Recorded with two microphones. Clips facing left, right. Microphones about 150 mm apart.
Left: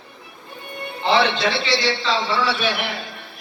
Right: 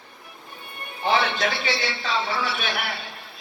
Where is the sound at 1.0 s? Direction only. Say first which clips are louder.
Left 4 dB; 75° left (ahead or behind).